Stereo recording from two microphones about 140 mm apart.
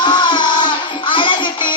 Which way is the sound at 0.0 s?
30° left (ahead or behind).